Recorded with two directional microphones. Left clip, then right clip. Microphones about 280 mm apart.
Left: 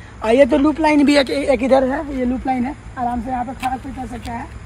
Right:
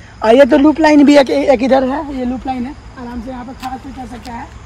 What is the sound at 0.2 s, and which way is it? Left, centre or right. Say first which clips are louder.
Speech: right 5 dB; right.